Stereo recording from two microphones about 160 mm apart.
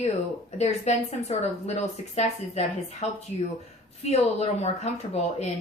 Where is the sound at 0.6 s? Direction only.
45° left (ahead or behind).